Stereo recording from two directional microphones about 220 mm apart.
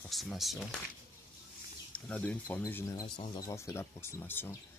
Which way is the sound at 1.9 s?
5° left (ahead or behind).